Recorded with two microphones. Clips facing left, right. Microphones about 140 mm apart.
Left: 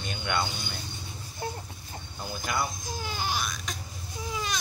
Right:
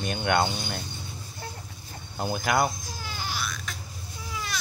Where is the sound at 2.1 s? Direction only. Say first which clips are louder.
Right 7 dB; 65° right (ahead or behind).